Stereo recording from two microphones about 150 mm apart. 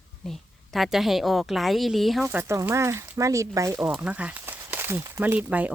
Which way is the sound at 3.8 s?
10° right (ahead or behind).